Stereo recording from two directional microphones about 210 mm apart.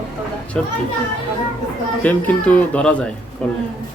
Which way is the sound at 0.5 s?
5° left (ahead or behind).